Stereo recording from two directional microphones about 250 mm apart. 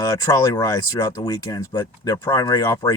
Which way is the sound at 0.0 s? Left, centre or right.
Centre.